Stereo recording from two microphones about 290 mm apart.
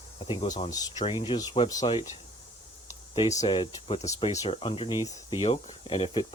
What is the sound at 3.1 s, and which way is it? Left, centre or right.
Speech, left.